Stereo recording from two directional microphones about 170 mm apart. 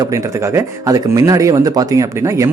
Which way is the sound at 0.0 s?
15° right (ahead or behind).